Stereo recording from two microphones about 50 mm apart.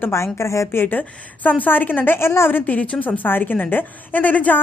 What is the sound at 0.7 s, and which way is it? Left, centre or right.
Speech, left.